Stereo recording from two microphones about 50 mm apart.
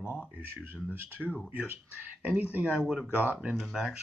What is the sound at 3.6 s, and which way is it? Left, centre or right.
Speech, centre.